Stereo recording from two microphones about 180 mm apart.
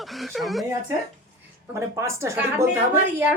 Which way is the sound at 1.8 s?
15° right (ahead or behind).